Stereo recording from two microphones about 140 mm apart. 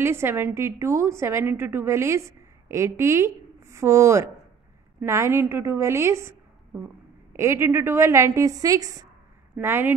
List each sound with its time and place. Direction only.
0.0 s a woman's voice: 15° right (ahead or behind)